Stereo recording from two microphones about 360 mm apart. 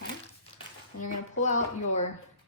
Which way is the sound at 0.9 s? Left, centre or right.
Left.